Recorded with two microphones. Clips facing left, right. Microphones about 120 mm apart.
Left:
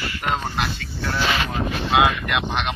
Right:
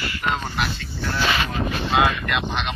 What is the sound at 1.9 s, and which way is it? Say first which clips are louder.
Speech: left 2 dB; 15° left (ahead or behind).